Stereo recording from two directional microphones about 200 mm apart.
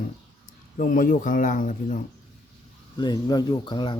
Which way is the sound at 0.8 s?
45° left (ahead or behind).